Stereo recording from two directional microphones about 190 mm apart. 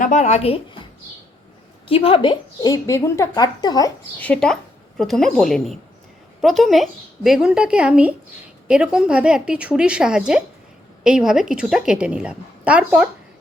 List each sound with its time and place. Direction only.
0.0 s speech: 40° left (ahead or behind)
1.9 s a woman's voice: 30° left (ahead or behind)
4.2 s a woman's voice: 5° left (ahead or behind)